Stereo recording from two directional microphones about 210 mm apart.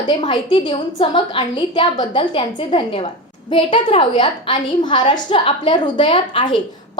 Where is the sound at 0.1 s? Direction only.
20° left (ahead or behind).